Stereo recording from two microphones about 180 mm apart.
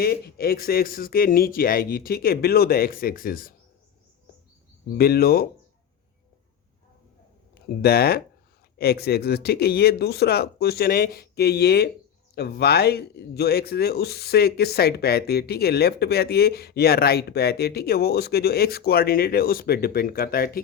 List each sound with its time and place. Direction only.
0.0 s a man's voice: 55° left (ahead or behind)
4.9 s a man's voice: 60° left (ahead or behind)
7.8 s a man's voice: 60° left (ahead or behind)